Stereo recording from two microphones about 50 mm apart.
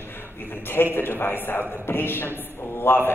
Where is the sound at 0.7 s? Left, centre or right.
Left.